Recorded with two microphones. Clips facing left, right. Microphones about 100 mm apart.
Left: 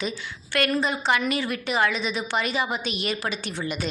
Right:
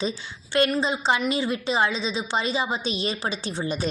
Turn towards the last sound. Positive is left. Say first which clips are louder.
# right 2 dB
turn(degrees=-30)  # may be behind; listen again after turning